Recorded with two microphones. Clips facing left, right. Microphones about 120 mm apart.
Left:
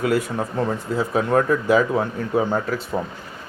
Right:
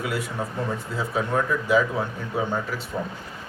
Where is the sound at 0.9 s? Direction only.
55° left (ahead or behind).